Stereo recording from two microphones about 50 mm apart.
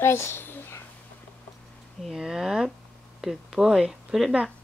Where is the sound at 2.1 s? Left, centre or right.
Centre.